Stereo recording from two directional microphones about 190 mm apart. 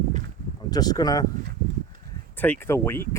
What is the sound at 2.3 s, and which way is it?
Speech, 10° left (ahead or behind).